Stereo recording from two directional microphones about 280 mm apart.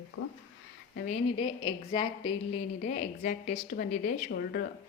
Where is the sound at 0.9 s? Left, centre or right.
Left.